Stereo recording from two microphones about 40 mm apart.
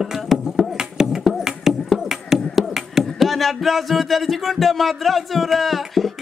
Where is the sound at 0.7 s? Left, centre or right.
Centre.